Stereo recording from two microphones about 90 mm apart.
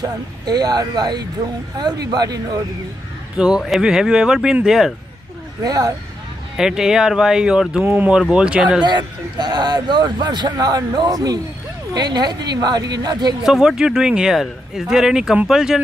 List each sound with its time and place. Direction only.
0.0 s a man's voice: 50° right (ahead or behind)
3.3 s speech: 10° right (ahead or behind)
5.6 s a man's voice: 45° right (ahead or behind)
6.5 s speech: 5° right (ahead or behind)
7.8 s speech: 20° right (ahead or behind)
8.1 s speech: 10° right (ahead or behind)
8.8 s a man's voice: 55° right (ahead or behind)
13.4 s speech: 5° right (ahead or behind)